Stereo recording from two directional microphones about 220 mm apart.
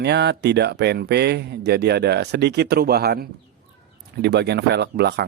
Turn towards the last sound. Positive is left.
turn(degrees=-50)  # may be behind; listen again after turning